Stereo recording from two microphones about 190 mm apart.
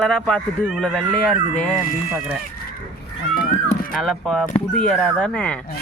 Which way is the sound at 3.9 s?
Centre (ahead or behind).